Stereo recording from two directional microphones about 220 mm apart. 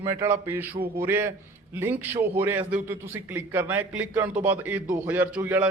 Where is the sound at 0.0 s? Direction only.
10° right (ahead or behind).